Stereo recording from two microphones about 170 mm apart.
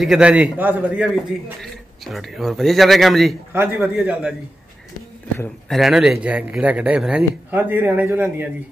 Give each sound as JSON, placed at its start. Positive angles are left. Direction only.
{"t": 0.0, "sound": "a man's voice", "side_deg": -5}
{"t": 3.5, "sound": "speech", "side_deg": -15}
{"t": 5.7, "sound": "speech", "side_deg": 0}